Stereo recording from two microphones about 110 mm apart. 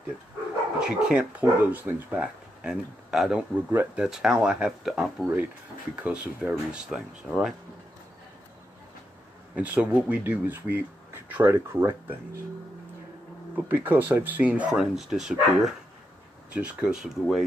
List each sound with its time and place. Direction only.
0.7 s speech: 10° right (ahead or behind)
9.6 s speech: 15° right (ahead or behind)
13.6 s speech: 15° right (ahead or behind)